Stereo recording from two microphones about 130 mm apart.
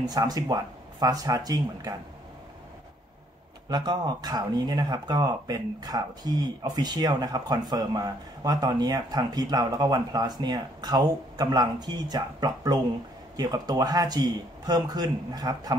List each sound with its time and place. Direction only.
0.0 s speech: 30° right (ahead or behind)
3.6 s speech: 35° right (ahead or behind)